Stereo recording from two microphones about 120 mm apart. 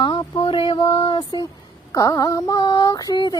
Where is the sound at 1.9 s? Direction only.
30° left (ahead or behind).